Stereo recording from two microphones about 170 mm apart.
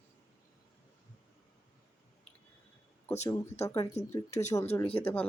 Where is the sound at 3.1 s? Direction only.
40° left (ahead or behind).